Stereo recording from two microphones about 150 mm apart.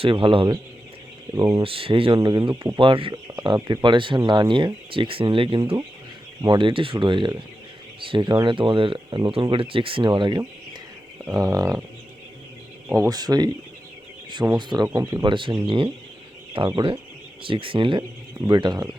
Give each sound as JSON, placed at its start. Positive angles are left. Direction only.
{"t": 0.0, "sound": "speech", "side_deg": -35}
{"t": 1.4, "sound": "speech", "side_deg": -20}
{"t": 1.6, "sound": "speech", "side_deg": -40}
{"t": 12.9, "sound": "speech", "side_deg": -25}